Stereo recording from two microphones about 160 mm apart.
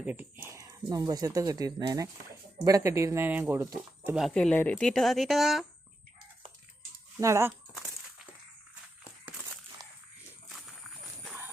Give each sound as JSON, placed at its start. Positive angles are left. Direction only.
{"t": 0.0, "sound": "speech", "side_deg": -10}
{"t": 4.4, "sound": "speech", "side_deg": 10}
{"t": 7.2, "sound": "speech", "side_deg": -20}